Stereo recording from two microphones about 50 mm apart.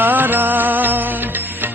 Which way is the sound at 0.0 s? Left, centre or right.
Right.